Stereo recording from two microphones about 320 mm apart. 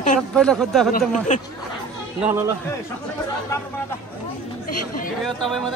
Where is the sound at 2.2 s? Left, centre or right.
Centre.